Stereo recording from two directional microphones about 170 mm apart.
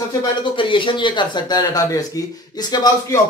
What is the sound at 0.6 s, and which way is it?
Speech, 30° left (ahead or behind).